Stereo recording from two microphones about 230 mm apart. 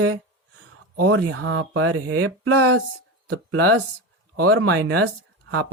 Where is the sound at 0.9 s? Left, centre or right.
Right.